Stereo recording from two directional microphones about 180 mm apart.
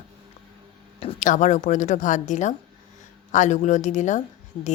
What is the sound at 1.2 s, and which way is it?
Speech, 45° left (ahead or behind).